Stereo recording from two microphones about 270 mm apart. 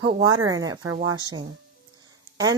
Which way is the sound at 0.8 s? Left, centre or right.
Right.